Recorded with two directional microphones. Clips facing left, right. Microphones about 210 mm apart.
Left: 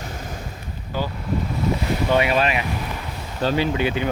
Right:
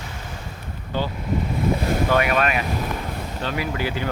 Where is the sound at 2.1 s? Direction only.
25° left (ahead or behind).